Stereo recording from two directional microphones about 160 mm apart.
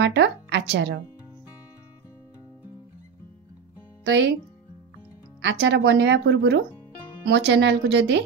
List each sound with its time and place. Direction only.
0.0 s a woman's voice: 90° right
4.0 s speech: 90° right
5.5 s speech: 90° right